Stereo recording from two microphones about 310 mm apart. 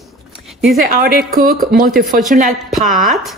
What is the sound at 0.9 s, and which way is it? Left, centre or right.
A woman's voice, right.